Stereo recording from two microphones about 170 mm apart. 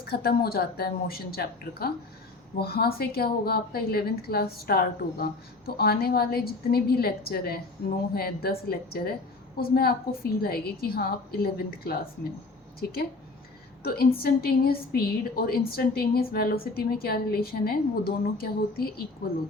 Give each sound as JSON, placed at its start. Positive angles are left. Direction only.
{"t": 0.0, "sound": "a woman's voice", "side_deg": 65}